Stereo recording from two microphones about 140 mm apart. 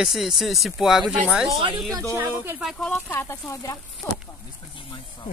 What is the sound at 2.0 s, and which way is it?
Speech, 20° right (ahead or behind).